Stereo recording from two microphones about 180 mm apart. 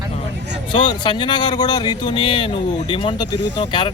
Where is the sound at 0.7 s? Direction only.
25° left (ahead or behind).